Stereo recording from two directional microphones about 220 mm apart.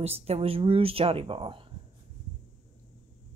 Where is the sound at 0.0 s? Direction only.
30° right (ahead or behind).